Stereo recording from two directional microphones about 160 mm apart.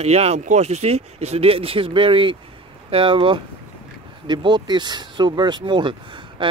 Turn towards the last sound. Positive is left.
turn(degrees=-30)  # may be behind; listen again after turning